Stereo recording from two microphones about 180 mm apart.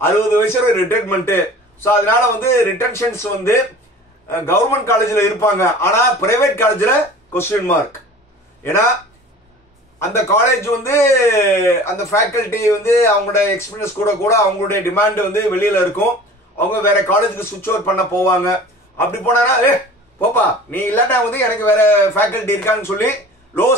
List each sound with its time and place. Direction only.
0.0 s a man's voice: 15° left (ahead or behind)
9.9 s a man's voice: 15° left (ahead or behind)
20.7 s a man's voice: 10° left (ahead or behind)